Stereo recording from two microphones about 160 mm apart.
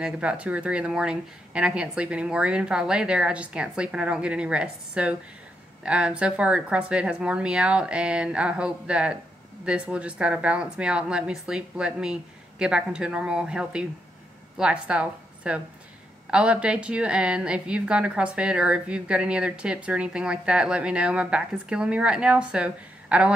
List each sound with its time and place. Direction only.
0.0 s a woman's voice: 5° right (ahead or behind)